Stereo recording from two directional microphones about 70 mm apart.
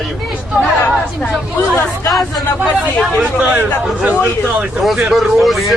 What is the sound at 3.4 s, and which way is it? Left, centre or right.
Speech, right.